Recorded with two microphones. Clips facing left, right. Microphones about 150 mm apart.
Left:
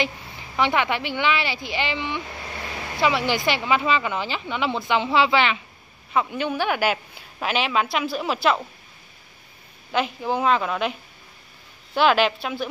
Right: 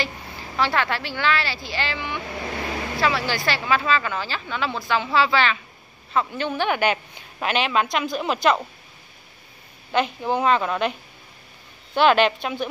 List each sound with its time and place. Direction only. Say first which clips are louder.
0.6 s a woman's voice: left 1 dB; 20° left (ahead or behind); by 8.5 s centre (ahead or behind)
9.9 s a woman's voice: right 1 dB; 5° left (ahead or behind)